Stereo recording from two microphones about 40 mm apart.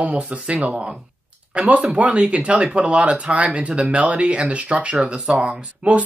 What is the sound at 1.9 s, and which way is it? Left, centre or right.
Speech, right.